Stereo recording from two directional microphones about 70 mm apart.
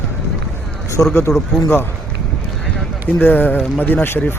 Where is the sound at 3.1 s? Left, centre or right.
Left.